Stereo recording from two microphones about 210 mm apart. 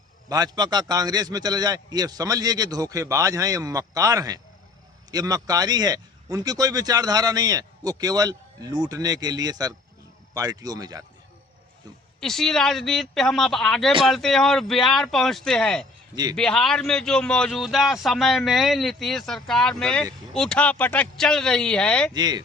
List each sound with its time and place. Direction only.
0.3 s a man's voice: 20° right (ahead or behind)
12.2 s speech: centre (ahead or behind)
22.1 s speech: 20° right (ahead or behind)